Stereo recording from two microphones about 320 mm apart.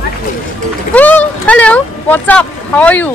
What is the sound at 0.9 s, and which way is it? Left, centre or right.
Speech, centre.